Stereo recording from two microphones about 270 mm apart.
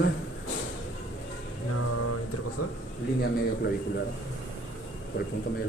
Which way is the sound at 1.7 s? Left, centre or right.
Left.